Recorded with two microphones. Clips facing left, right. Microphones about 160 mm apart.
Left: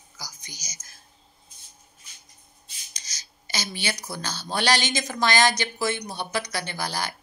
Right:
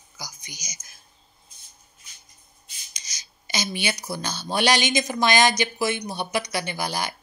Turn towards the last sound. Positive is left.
turn(degrees=-15)  # may be behind; listen again after turning